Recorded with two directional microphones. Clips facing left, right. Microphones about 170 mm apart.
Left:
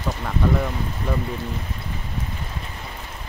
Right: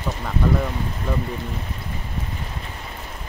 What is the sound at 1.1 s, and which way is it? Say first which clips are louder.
Speech: even; centre (ahead or behind).